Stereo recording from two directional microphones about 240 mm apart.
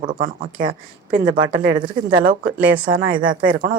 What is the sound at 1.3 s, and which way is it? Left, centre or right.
Speech, right.